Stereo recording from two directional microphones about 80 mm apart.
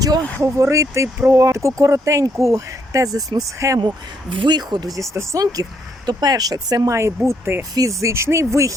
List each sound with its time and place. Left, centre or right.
0.4 s speech: right
3.8 s speech: right
4.9 s speech: right
7.3 s speech: right
7.8 s speech: right